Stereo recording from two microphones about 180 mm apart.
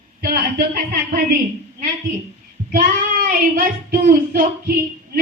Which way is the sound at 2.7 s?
50° right (ahead or behind).